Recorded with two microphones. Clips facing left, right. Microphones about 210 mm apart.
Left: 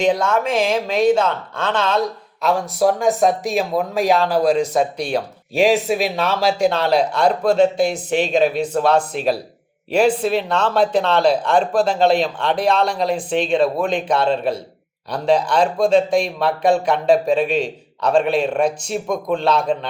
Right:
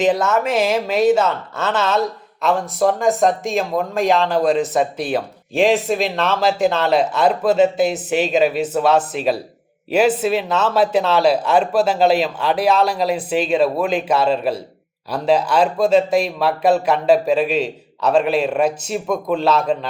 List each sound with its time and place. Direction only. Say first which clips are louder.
0.0 s speech: right 1 dB; 5° right (ahead or behind)